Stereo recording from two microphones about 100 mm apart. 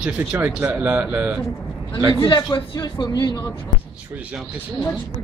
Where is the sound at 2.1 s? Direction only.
55° left (ahead or behind).